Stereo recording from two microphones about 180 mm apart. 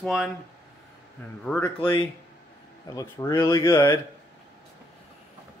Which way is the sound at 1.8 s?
30° left (ahead or behind).